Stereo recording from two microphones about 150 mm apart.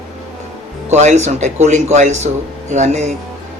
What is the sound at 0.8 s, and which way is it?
Speech, 50° right (ahead or behind).